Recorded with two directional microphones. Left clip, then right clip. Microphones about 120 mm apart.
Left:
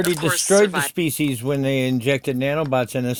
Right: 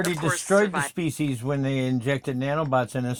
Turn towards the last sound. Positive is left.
turn(degrees=45)  # may be behind; listen again after turning